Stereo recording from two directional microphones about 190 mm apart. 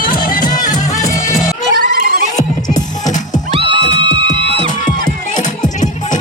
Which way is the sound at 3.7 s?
75° left (ahead or behind).